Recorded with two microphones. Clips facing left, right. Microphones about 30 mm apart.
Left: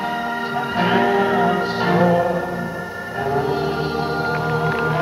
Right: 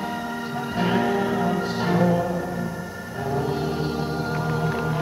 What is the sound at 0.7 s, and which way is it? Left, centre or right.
Music, left.